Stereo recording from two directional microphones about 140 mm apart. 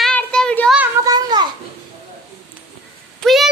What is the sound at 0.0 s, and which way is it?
Child singing, 10° left (ahead or behind).